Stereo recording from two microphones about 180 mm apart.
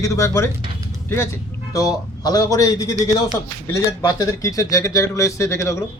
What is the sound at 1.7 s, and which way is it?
A man's voice, 20° left (ahead or behind).